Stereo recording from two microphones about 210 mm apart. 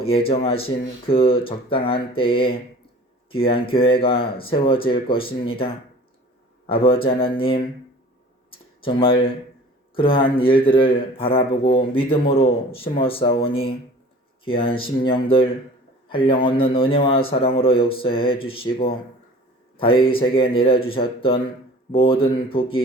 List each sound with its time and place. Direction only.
0.0 s speech: 25° left (ahead or behind)
8.4 s a sound: 25° left (ahead or behind)
9.9 s speech: 25° left (ahead or behind)